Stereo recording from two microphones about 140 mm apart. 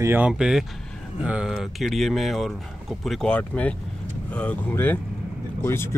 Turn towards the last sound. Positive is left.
turn(degrees=15)  # may be behind; listen again after turning